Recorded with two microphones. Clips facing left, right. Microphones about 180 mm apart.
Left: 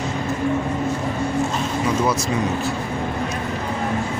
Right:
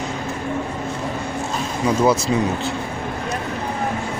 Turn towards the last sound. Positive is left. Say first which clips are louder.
# right 1 dB
turn(degrees=-30)  # may be behind; listen again after turning